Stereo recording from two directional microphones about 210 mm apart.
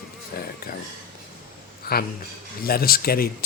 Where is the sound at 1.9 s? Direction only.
45° left (ahead or behind).